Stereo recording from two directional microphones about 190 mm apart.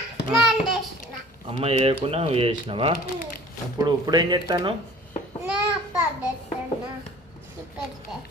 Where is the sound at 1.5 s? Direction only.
30° right (ahead or behind).